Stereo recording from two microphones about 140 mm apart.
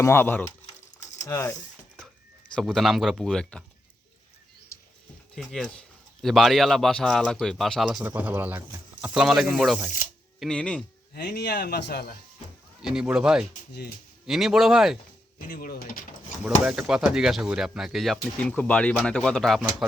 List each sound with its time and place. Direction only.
0.0 s speech: 15° left (ahead or behind)
2.6 s speech: centre (ahead or behind)
5.3 s speech: 5° left (ahead or behind)
10.4 s speech: 5° left (ahead or behind)
11.1 s speech: 90° left
12.8 s speech: 5° right (ahead or behind)
15.4 s speech: 90° left
16.4 s speech: 5° right (ahead or behind)